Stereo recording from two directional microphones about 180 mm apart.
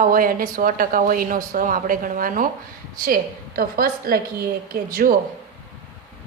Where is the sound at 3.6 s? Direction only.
55° right (ahead or behind).